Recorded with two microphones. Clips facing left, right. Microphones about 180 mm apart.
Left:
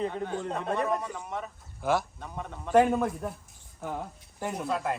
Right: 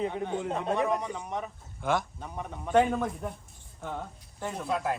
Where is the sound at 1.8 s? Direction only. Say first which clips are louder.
Left 1 dB; 5° left (ahead or behind).